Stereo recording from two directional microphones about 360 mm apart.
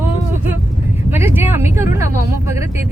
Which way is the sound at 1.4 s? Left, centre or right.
Centre.